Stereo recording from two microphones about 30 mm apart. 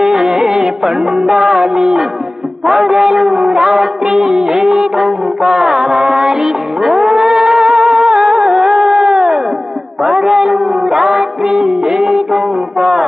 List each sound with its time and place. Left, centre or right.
0.0 s music: centre